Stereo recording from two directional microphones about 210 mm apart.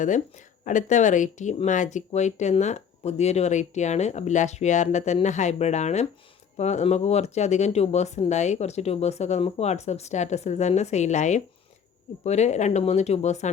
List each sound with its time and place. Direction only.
0.6 s speech: 35° left (ahead or behind)